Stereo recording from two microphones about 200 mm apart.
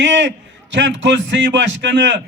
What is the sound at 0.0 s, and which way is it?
A man's voice, 60° right (ahead or behind).